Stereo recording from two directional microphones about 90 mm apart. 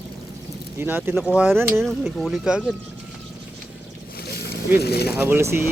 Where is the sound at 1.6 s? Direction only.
25° right (ahead or behind).